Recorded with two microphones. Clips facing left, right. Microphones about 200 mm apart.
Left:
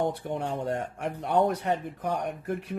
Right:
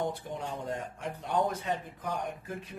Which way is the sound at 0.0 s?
65° left (ahead or behind).